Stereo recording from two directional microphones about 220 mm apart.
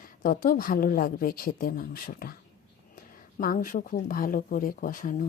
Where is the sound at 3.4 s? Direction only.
40° left (ahead or behind).